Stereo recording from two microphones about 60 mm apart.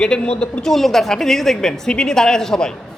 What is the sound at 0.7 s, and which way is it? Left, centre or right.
A man's voice, centre.